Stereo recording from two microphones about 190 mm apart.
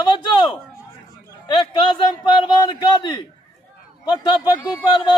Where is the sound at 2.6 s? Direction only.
25° left (ahead or behind).